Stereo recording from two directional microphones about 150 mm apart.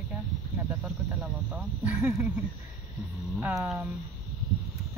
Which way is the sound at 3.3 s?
20° right (ahead or behind).